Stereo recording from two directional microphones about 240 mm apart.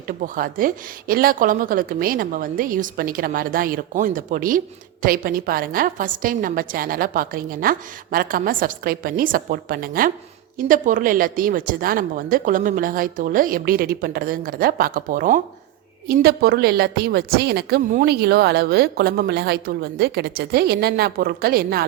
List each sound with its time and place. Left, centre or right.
0.2 s a woman's voice: right